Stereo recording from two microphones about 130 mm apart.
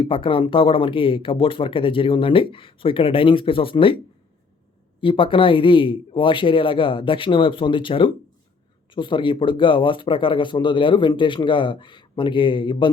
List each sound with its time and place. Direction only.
0.0 s speech: 40° left (ahead or behind)